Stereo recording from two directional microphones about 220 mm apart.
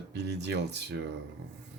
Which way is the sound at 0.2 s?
50° right (ahead or behind).